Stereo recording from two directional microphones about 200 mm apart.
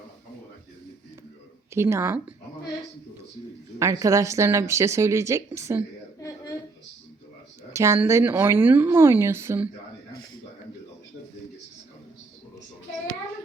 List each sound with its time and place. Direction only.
1.7 s a woman's voice: 15° right (ahead or behind)
3.8 s a woman's voice: 15° right (ahead or behind)
6.1 s a sound: 15° left (ahead or behind)
7.7 s a woman's voice: 15° right (ahead or behind)